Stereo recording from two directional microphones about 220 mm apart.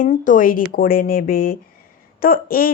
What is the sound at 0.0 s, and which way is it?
Speech, 35° left (ahead or behind).